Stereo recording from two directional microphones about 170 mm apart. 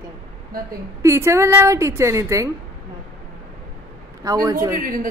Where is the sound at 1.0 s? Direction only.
15° right (ahead or behind).